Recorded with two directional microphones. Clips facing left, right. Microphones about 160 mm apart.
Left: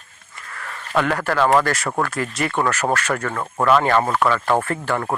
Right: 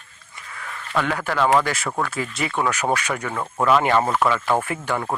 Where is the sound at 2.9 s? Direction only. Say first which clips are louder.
Left 2 dB; 10° right (ahead or behind).